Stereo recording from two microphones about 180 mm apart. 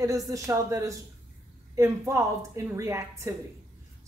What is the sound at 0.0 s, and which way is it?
A woman's voice, 15° right (ahead or behind).